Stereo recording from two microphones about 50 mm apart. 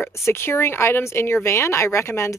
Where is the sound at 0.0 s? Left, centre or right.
Left.